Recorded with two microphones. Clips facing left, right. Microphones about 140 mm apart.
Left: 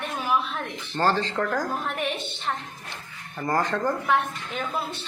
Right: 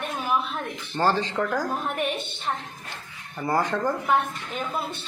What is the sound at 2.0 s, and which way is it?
Speech, 50° right (ahead or behind).